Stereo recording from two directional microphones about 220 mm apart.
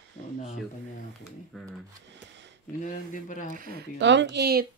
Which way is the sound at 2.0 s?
55° right (ahead or behind).